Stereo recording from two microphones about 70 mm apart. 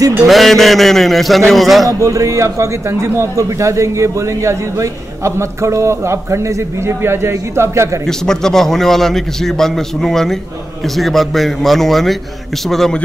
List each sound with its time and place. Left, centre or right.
0.3 s a man's voice: centre
1.9 s a man's voice: right
8.1 s a man's voice: centre